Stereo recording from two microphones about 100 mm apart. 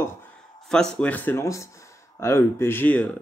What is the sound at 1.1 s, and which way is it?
Speech, 20° left (ahead or behind).